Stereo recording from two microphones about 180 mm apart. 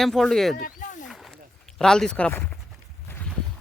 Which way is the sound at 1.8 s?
5° left (ahead or behind).